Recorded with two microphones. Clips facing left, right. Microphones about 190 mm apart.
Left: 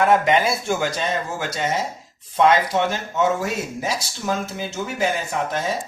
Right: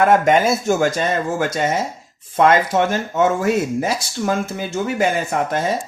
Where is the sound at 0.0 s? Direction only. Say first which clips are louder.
Right 3 dB; 50° right (ahead or behind).